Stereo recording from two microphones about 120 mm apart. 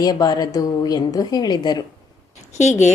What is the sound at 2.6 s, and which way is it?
Speech, 75° left (ahead or behind).